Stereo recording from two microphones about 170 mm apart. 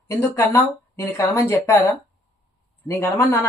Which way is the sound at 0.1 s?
15° left (ahead or behind).